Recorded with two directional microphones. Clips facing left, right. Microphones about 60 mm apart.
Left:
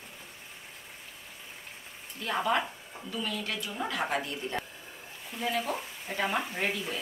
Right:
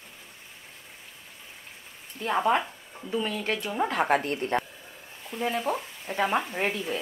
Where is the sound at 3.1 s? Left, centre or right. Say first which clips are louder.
Right 6 dB; right.